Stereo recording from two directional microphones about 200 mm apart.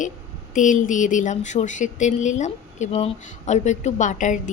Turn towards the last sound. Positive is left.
turn(degrees=40)  # may be behind; listen again after turning